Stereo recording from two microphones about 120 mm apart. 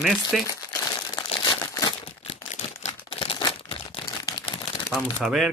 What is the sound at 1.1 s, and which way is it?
Crumpling, 30° left (ahead or behind).